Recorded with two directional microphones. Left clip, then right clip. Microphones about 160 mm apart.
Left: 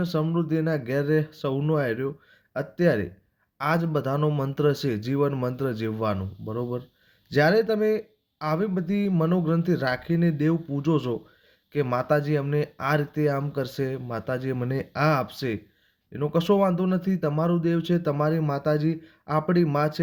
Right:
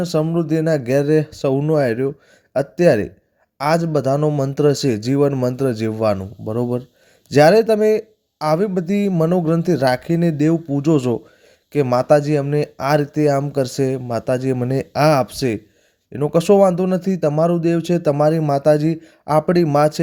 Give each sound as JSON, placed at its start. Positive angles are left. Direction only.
{"t": 0.0, "sound": "speech", "side_deg": -40}